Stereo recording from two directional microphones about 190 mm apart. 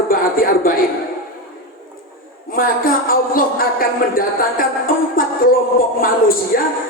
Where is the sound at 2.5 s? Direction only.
50° left (ahead or behind).